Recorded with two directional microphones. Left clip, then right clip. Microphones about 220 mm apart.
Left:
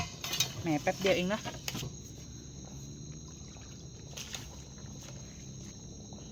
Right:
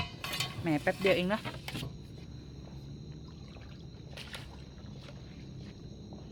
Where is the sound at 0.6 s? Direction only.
5° right (ahead or behind).